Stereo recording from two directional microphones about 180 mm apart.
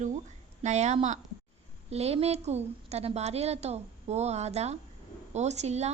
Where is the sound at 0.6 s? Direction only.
40° right (ahead or behind).